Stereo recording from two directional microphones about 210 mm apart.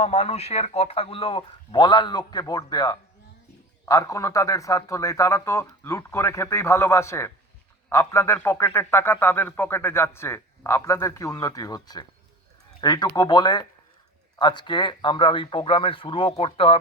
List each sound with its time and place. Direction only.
0.0 s a man's voice: 30° left (ahead or behind)